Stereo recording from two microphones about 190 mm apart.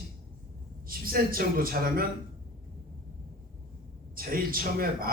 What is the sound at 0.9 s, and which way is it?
A man's voice, 50° right (ahead or behind).